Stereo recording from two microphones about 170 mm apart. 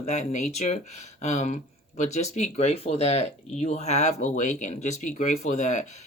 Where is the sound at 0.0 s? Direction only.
40° left (ahead or behind).